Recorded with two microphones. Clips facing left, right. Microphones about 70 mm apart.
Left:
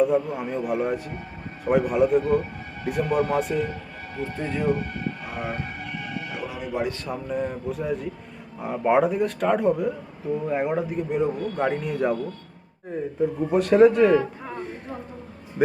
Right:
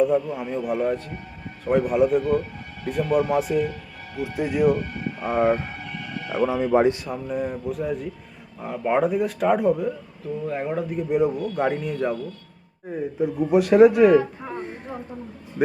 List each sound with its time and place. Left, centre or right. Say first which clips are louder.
0.3 s a man's voice: even; centre
5.2 s speech: right 10 dB; right
7.0 s a man's voice: right 1 dB; centre
8.6 s a man's voice: left 2 dB; centre
10.3 s speech: left 2 dB; centre
10.8 s a man's voice: right 3 dB; centre
11.3 s a man's voice: right 2 dB; left
11.8 s a man's voice: left 1 dB; centre
12.9 s speech: even; centre